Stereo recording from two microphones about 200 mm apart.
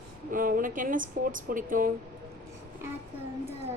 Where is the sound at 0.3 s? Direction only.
45° right (ahead or behind).